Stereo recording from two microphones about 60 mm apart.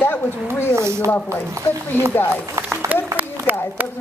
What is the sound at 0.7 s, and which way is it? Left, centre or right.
Speech, right.